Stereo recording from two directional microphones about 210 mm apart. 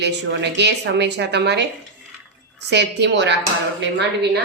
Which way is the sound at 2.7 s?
55° right (ahead or behind).